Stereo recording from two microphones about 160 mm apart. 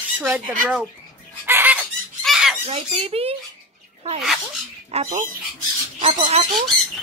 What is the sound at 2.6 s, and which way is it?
Speech, 35° right (ahead or behind).